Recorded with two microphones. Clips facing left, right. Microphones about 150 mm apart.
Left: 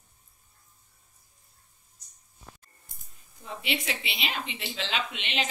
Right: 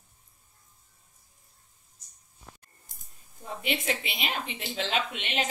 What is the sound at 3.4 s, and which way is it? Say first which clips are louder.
A woman's voice: right 1 dB; 50° right (ahead or behind).